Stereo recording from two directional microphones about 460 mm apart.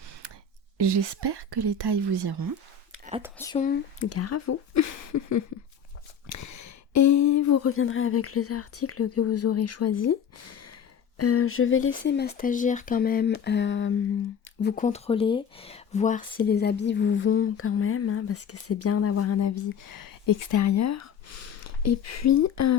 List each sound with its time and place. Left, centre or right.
0.8 s speech: right
2.9 s a sound: centre
3.2 s speech: centre
3.4 s speech: centre
4.0 s speech: left